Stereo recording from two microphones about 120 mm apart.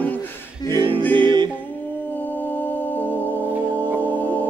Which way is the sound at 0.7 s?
40° right (ahead or behind).